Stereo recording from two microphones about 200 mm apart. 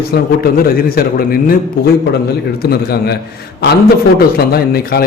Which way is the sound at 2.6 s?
50° left (ahead or behind).